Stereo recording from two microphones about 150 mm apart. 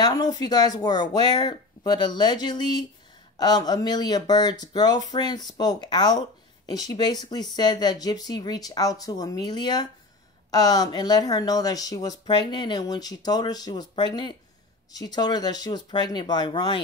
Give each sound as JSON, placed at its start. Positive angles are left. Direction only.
{"t": 0.0, "sound": "speech", "side_deg": 25}